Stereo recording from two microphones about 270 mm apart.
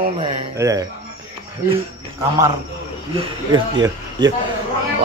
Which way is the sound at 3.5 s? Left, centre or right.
Centre.